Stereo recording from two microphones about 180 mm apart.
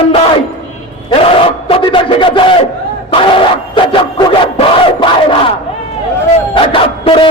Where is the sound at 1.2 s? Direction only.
30° left (ahead or behind).